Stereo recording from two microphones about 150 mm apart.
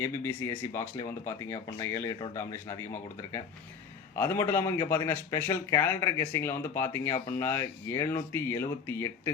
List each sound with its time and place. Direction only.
0.0 s a man's voice: 15° left (ahead or behind)